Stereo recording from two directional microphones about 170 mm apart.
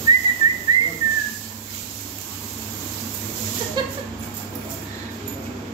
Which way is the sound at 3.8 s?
25° right (ahead or behind).